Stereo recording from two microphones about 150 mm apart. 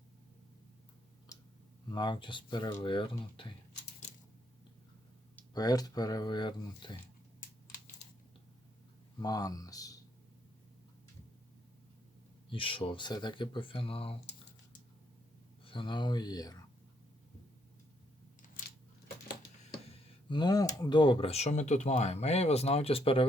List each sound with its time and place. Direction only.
1.3 s a sound: 20° left (ahead or behind)
1.9 s speech: 30° left (ahead or behind)
5.5 s speech: 25° left (ahead or behind)
9.2 s speech: 25° left (ahead or behind)
12.5 s speech: 35° left (ahead or behind)
15.6 s speech: 35° left (ahead or behind)
20.3 s speech: 30° left (ahead or behind)